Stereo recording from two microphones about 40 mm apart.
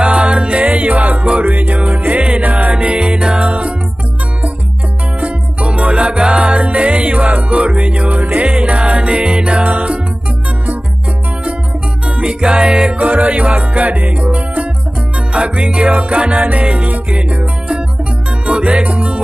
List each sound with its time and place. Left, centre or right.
0.0 s music: right
1.4 s music: right
2.5 s music: right
5.2 s music: right
6.4 s music: right
9.6 s music: right
12.2 s music: right
13.0 s music: right